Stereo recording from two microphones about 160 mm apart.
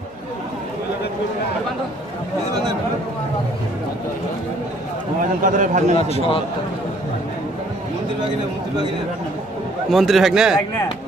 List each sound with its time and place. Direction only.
5.4 s a man's voice: 50° right (ahead or behind)
5.9 s a man's voice: 40° left (ahead or behind)
9.8 s a man's voice: centre (ahead or behind)